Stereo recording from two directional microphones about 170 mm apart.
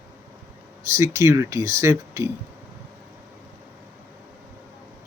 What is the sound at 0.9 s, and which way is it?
Speech, 15° right (ahead or behind).